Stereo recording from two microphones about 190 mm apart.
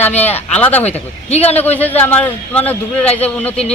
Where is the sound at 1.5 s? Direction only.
10° left (ahead or behind).